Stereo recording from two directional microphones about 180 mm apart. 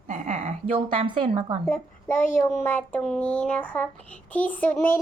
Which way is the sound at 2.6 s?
10° left (ahead or behind).